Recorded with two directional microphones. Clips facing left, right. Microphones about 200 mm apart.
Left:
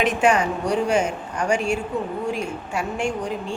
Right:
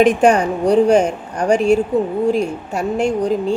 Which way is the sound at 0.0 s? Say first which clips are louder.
Right 7 dB; 40° right (ahead or behind).